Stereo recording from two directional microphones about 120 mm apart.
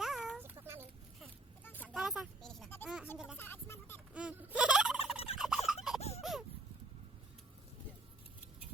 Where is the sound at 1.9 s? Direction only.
Centre (ahead or behind).